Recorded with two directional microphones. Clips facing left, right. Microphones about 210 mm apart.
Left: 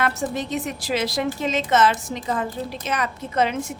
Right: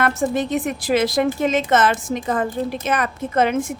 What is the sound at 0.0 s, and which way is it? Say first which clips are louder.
A woman's voice: right 5 dB; 50° right (ahead or behind).